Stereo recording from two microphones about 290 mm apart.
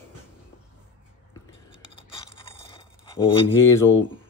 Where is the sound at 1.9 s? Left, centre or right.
Centre.